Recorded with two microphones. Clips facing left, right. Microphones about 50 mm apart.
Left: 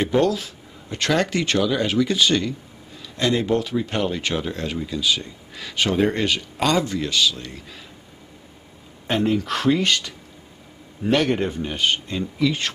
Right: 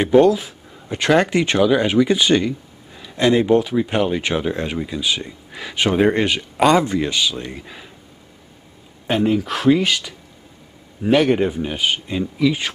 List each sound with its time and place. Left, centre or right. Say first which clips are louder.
0.0 s speech: right 6 dB; centre
9.0 s a man's voice: right 3 dB; centre